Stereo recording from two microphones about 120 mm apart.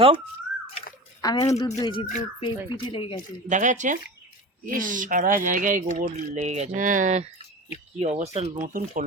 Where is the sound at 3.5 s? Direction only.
90° right.